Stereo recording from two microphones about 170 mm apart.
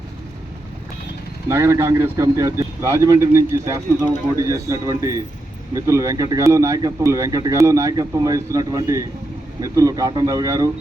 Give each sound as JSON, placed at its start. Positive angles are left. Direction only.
{"t": 1.5, "sound": "speech", "side_deg": -15}